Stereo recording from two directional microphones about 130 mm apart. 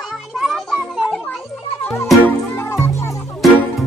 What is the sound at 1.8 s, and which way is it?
Music, 15° left (ahead or behind).